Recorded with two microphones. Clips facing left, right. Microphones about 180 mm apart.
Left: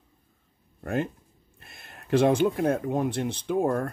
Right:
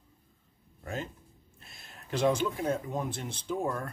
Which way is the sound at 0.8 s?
60° left (ahead or behind).